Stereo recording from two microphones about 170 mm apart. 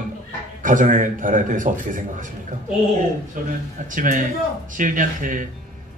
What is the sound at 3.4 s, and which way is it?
A man's voice, 50° right (ahead or behind).